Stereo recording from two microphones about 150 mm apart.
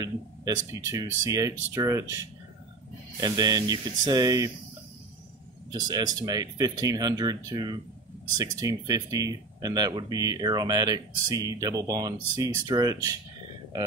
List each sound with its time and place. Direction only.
0.0 s speech: 25° right (ahead or behind)
3.2 s speech: 25° right (ahead or behind)
5.7 s speech: 25° right (ahead or behind)